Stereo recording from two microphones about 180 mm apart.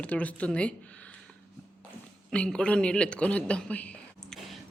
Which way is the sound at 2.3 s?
5° left (ahead or behind).